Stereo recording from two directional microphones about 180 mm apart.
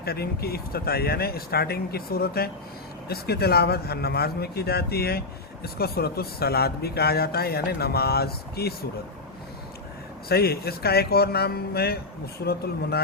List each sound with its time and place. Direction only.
0.0 s a man's voice: 60° left (ahead or behind)
10.2 s a man's voice: 60° left (ahead or behind)